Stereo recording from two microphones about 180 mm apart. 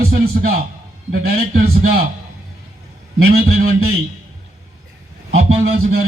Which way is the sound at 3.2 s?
60° right (ahead or behind).